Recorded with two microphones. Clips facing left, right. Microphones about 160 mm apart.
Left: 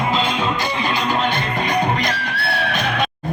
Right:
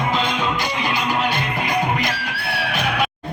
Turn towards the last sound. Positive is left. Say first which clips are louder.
# left 1 dB
turn(degrees=-10)  # may be behind; listen again after turning